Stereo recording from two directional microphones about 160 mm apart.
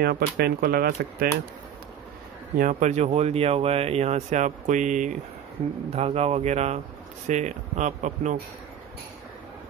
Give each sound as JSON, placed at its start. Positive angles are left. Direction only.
{"t": 0.0, "sound": "speech", "side_deg": -75}
{"t": 2.5, "sound": "speech", "side_deg": -55}